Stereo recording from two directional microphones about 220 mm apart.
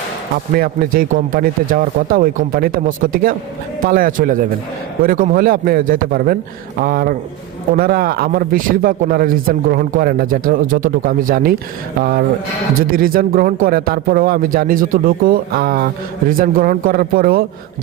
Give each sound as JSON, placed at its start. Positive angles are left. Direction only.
{"t": 0.5, "sound": "speech", "side_deg": -40}